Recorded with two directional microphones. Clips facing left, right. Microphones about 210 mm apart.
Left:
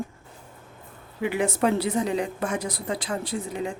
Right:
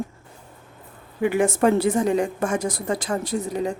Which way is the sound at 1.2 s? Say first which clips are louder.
Right 5 dB; 45° right (ahead or behind).